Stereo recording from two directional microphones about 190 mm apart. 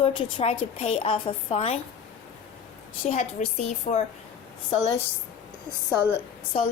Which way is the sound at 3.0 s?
35° left (ahead or behind).